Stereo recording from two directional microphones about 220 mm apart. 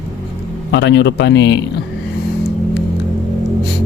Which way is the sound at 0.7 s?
55° left (ahead or behind).